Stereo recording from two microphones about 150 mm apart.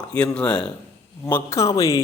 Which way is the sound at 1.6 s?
20° left (ahead or behind).